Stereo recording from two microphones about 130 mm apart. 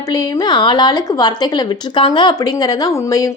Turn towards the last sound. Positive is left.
turn(degrees=30)  # may be behind; listen again after turning